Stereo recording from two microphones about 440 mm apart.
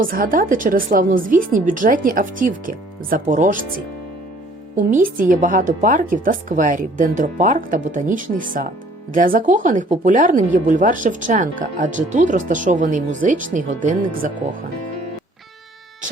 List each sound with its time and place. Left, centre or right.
0.0 s a woman's voice: centre
4.8 s speech: centre